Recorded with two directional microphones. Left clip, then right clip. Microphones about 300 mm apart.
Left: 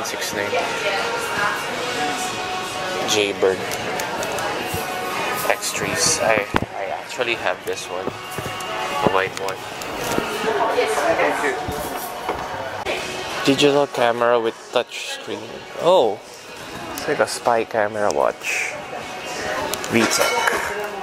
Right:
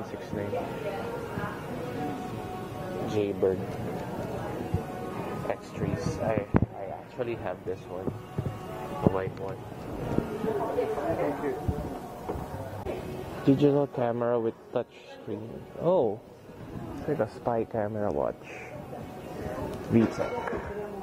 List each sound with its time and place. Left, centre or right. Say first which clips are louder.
0.0 s music: left 12 dB; centre
7.2 s speech: left 11 dB; centre
8.7 s music: left 10 dB; centre
10.0 s speech: left 9 dB; centre
12.8 s music: left 10 dB; centre
13.9 s speech: left 10 dB; centre
15.8 s speech: left 10 dB; left
17.0 s speech: left 10 dB; centre
19.4 s a sound: left 11 dB; centre